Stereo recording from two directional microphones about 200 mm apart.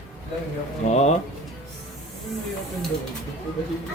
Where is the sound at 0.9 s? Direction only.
35° left (ahead or behind).